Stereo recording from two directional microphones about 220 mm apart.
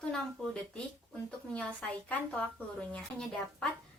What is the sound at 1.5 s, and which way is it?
A woman's voice, 5° left (ahead or behind).